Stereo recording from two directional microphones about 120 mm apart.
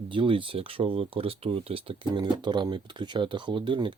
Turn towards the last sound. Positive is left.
turn(degrees=-40)  # may be behind; listen again after turning